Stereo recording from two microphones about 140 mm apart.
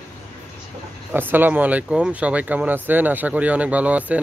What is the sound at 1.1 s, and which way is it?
Speech, 15° right (ahead or behind).